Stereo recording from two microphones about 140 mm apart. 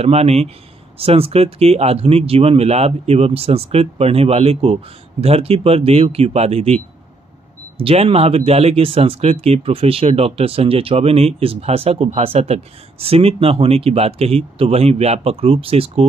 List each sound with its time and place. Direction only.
0.0 s speech: 50° right (ahead or behind)